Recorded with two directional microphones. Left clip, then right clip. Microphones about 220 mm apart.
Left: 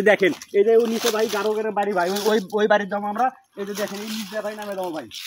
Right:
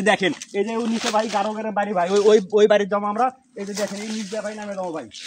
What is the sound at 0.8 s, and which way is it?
Speech, 45° left (ahead or behind).